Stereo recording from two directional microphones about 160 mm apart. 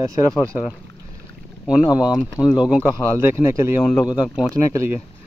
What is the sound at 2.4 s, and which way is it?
Speech, 15° left (ahead or behind).